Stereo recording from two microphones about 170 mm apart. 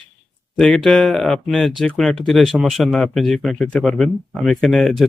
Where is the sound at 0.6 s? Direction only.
5° left (ahead or behind).